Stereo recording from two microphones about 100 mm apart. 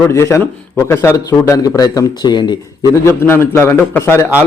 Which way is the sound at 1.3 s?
35° left (ahead or behind).